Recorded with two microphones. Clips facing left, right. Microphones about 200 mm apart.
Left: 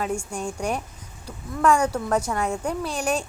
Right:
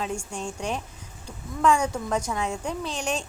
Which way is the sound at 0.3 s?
10° left (ahead or behind).